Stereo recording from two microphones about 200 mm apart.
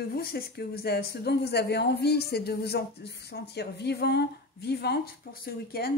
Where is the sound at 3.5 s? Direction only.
55° left (ahead or behind).